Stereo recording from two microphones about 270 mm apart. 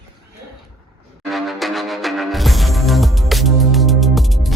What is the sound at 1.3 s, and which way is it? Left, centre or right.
Music, centre.